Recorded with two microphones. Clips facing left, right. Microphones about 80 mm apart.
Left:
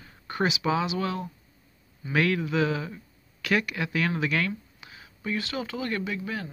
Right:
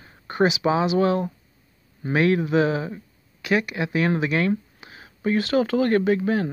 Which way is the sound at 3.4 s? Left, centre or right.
Centre.